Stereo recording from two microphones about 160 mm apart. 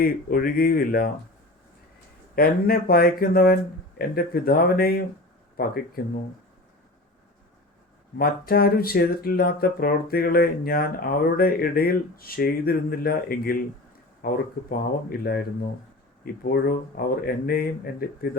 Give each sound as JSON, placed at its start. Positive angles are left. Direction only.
{"t": 0.0, "sound": "speech", "side_deg": 65}
{"t": 2.3, "sound": "speech", "side_deg": 70}
{"t": 8.2, "sound": "speech", "side_deg": 70}